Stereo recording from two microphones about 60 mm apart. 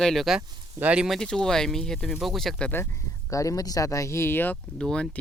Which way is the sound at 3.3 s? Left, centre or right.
Left.